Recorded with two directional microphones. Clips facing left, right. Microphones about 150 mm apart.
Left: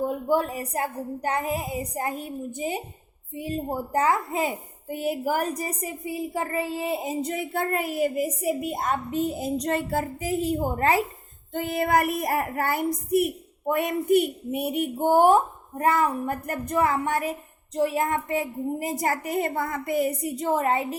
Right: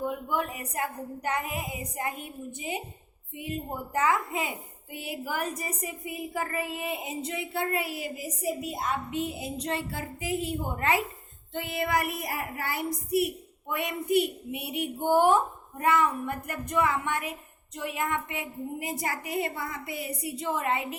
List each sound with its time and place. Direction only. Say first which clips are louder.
0.0 s a woman's voice: left 6 dB; 35° left (ahead or behind)